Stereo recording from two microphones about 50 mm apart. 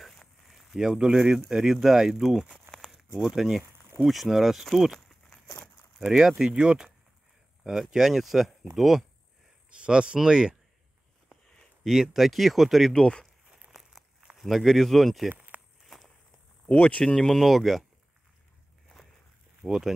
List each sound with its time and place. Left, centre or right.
0.0 s a sound: centre
0.7 s speech: centre
5.9 s speech: centre
7.9 s speech: centre
9.7 s speech: right
11.8 s speech: centre
12.9 s speech: centre
13.7 s a sound: centre
14.3 s speech: centre
15.8 s walk: centre
16.6 s speech: left
17.0 s speech: centre
17.4 s speech: centre
19.6 s speech: centre